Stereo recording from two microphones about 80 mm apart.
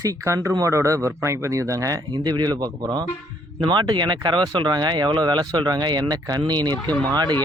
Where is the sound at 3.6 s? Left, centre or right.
Right.